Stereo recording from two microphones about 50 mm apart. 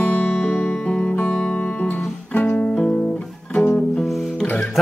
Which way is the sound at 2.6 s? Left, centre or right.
Centre.